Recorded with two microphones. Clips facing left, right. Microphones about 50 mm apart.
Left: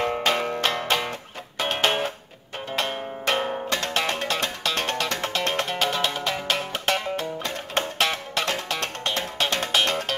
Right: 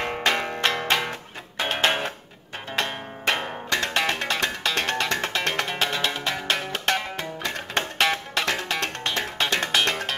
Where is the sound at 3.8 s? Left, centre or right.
Right.